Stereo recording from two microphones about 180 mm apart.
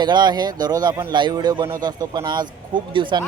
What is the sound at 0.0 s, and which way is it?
A man's voice, 25° right (ahead or behind).